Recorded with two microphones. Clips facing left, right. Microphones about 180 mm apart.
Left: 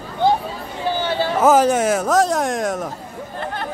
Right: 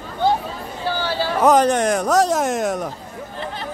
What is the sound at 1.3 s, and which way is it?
A man's voice, 5° left (ahead or behind).